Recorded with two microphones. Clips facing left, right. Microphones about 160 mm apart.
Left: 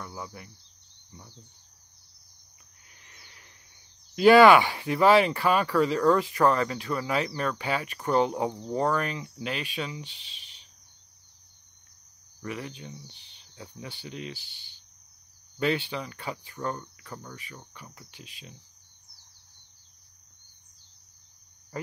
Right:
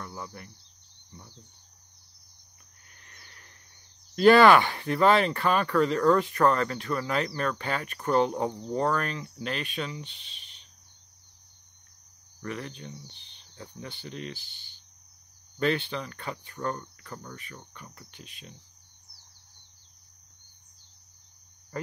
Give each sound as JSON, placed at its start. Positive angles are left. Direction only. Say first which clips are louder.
{"t": 0.0, "sound": "speech", "louder": "even", "side_deg": 5}
{"t": 3.0, "sound": "cricket", "louder": "right 1 dB", "side_deg": 15}
{"t": 4.1, "sound": "speech", "louder": "left 1 dB", "side_deg": 5}
{"t": 10.0, "sound": "speech", "louder": "even", "side_deg": -50}
{"t": 12.4, "sound": "speech", "louder": "even", "side_deg": 10}
{"t": 15.9, "sound": "speech", "louder": "even", "side_deg": 10}